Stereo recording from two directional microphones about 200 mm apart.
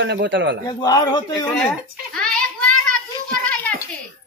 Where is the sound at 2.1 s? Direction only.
5° left (ahead or behind).